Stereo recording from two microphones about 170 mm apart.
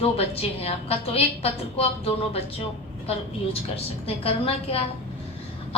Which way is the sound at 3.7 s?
35° left (ahead or behind).